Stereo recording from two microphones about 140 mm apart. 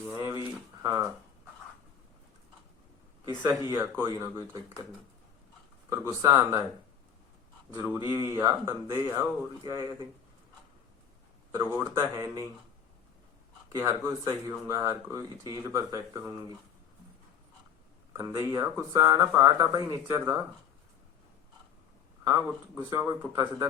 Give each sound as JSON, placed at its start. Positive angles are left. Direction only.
{"t": 0.1, "sound": "a sound", "side_deg": -20}
{"t": 0.8, "sound": "speech", "side_deg": -20}
{"t": 3.2, "sound": "speech", "side_deg": -25}
{"t": 5.9, "sound": "speech", "side_deg": -20}
{"t": 7.9, "sound": "speech", "side_deg": -20}
{"t": 11.5, "sound": "speech", "side_deg": -25}
{"t": 13.7, "sound": "speech", "side_deg": -20}
{"t": 18.1, "sound": "speech", "side_deg": -25}
{"t": 22.2, "sound": "speech", "side_deg": -20}